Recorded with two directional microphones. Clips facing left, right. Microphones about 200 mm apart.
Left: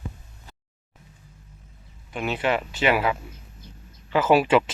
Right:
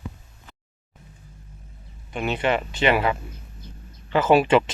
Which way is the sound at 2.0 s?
5° left (ahead or behind).